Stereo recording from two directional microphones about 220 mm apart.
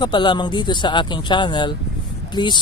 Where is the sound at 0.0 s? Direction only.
20° left (ahead or behind).